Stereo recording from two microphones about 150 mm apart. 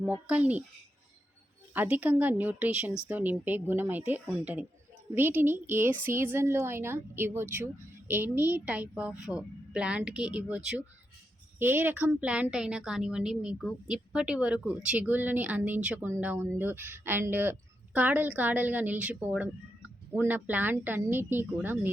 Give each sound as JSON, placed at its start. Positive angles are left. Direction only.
{"t": 0.1, "sound": "speech", "side_deg": -10}
{"t": 1.7, "sound": "a woman's voice", "side_deg": -10}